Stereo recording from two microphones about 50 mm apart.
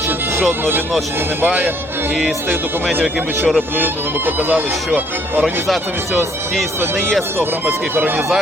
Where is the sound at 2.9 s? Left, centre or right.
Centre.